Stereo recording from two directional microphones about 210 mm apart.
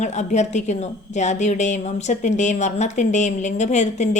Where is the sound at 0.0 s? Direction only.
35° left (ahead or behind).